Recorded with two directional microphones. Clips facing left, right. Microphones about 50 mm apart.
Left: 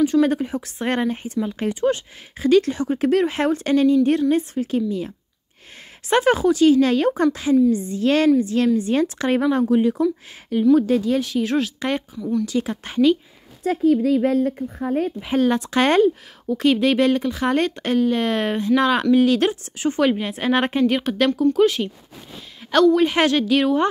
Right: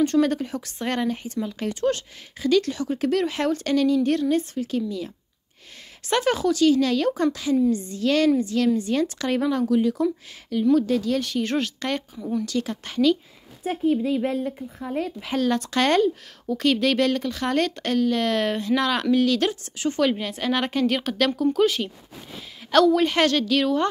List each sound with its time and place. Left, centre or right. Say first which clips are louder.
0.2 s a woman's voice: left 3 dB; centre
11.2 s speech: left 3 dB; centre
12.2 s speech: left 4 dB; centre
12.4 s a woman's voice: left 3 dB; left
13.7 s a woman's voice: left 5 dB; left
15.2 s a woman's voice: left 3 dB; left
20.8 s speech: left 4 dB; centre
22.6 s a sound: even; centre
23.0 s speech: left 3 dB; centre